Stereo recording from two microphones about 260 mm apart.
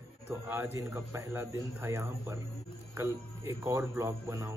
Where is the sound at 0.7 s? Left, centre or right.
Centre.